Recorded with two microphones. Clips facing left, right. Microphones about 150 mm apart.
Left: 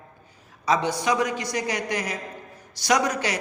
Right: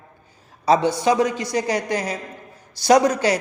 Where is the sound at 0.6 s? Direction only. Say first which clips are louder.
Right 6 dB; 30° right (ahead or behind).